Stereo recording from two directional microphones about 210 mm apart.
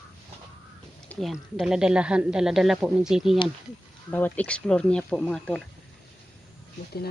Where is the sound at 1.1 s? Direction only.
Centre (ahead or behind).